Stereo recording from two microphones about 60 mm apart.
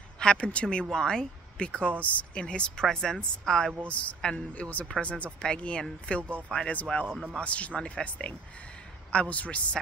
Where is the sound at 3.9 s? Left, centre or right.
Left.